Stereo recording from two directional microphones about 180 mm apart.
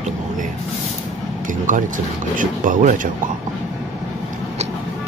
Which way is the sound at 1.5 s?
45° right (ahead or behind).